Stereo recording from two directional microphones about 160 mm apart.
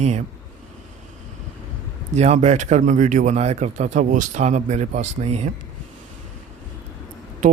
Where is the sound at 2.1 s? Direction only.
45° right (ahead or behind).